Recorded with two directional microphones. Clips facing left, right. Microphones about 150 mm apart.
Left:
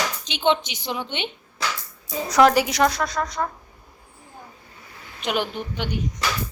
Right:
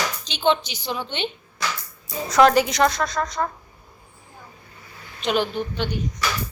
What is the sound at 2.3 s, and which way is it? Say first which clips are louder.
A woman's voice: right 1 dB; 10° left (ahead or behind).